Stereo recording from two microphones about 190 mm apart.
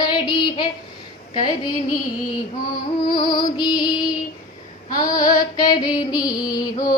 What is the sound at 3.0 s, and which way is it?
Music, 25° left (ahead or behind).